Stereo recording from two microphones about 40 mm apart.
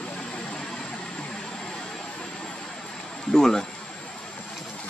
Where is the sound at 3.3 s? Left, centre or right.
Centre.